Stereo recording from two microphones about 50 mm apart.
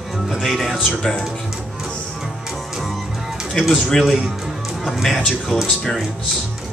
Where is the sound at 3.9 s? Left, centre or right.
Centre.